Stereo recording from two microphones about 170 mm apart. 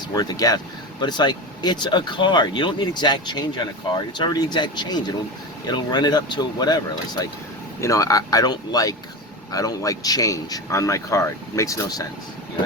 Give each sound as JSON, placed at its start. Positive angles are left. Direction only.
{"t": 0.1, "sound": "speech", "side_deg": 20}